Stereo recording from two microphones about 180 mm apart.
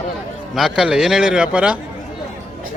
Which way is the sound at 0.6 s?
5° right (ahead or behind).